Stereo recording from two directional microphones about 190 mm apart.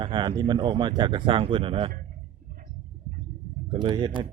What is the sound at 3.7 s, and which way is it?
Speech, 25° right (ahead or behind).